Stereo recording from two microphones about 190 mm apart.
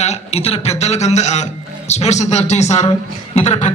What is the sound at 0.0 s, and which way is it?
A man's voice, 35° left (ahead or behind).